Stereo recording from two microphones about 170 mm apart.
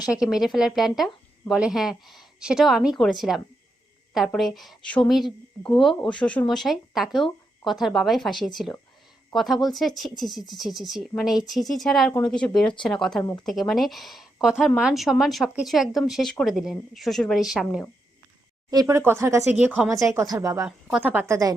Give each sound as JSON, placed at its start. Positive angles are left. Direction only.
{"t": 0.0, "sound": "speech", "side_deg": -5}
{"t": 18.7, "sound": "speech", "side_deg": -20}
{"t": 20.0, "sound": "speech", "side_deg": -20}
{"t": 20.7, "sound": "speech", "side_deg": -5}